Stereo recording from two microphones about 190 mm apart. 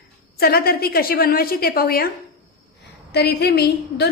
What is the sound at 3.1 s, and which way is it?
Speech, 60° left (ahead or behind).